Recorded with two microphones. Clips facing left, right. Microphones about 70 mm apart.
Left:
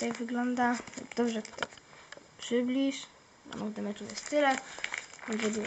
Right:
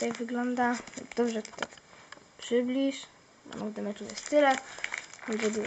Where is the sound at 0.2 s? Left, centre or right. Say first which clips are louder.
Right 1 dB; centre.